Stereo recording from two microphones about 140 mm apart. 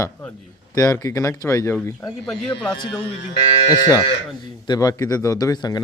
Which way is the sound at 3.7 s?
25° left (ahead or behind).